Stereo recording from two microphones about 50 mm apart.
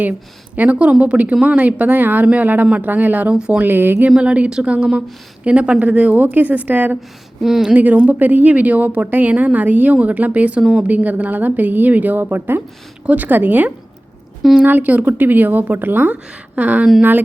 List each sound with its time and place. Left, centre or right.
0.0 s a woman's voice: right
3.3 s speech: centre
3.6 s speech: right
4.2 s a woman's voice: right
7.4 s speech: centre
7.8 s a woman's voice: right
12.2 s speech: right
13.1 s a woman's voice: right